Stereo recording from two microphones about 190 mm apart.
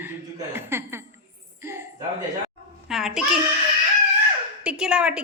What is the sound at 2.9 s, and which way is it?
Speech, centre (ahead or behind).